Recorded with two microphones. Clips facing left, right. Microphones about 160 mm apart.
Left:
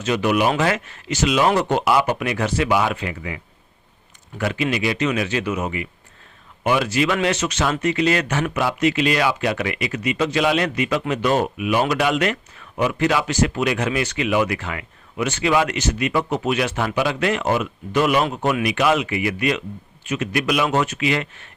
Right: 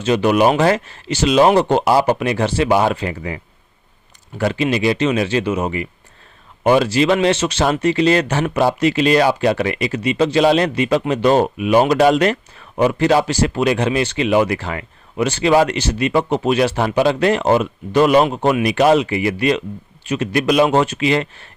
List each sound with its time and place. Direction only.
0.0 s speech: 30° right (ahead or behind)